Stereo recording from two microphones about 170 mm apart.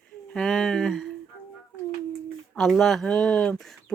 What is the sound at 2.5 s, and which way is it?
Speech, centre (ahead or behind).